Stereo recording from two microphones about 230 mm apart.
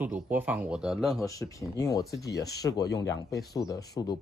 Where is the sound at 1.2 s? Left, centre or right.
Centre.